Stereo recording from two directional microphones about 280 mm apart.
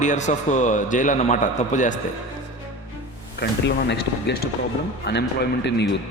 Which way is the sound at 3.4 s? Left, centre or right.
Left.